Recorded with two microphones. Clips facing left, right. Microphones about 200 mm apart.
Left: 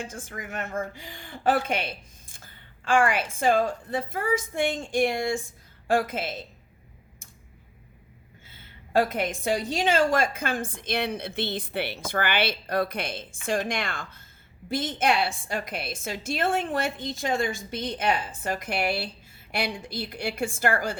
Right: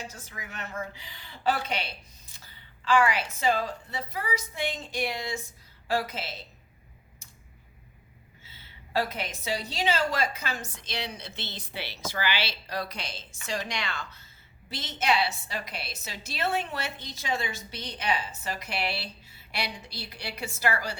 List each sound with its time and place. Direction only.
0.0 s speech: 50° left (ahead or behind)
8.4 s speech: 50° left (ahead or behind)